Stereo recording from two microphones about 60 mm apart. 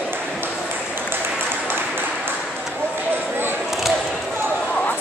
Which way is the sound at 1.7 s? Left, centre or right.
Right.